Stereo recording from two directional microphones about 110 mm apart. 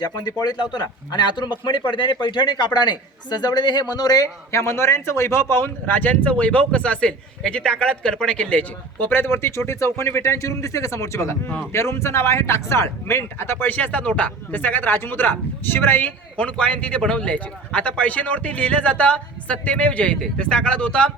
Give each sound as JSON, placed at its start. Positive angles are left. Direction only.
{"t": 0.0, "sound": "a man's voice", "side_deg": 40}